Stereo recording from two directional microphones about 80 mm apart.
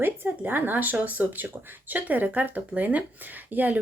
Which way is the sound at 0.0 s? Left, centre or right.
Right.